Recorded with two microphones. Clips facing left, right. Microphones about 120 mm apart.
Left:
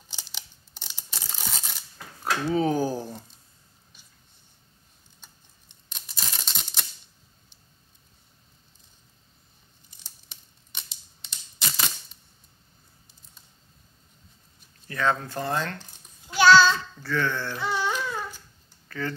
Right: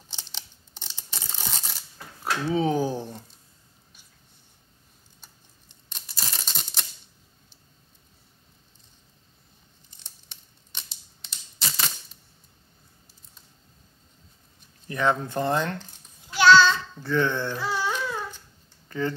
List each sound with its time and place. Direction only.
0.1 s scissors: 10° left (ahead or behind)
1.1 s tearing: centre (ahead or behind)
2.4 s speech: centre (ahead or behind)
5.9 s a sound: centre (ahead or behind)
10.0 s a sound: 5° left (ahead or behind)
14.9 s speech: 20° right (ahead or behind)
16.3 s child singing: 10° left (ahead or behind)
16.9 s speech: 20° right (ahead or behind)
17.6 s babbling: 5° right (ahead or behind)
18.9 s speech: 20° right (ahead or behind)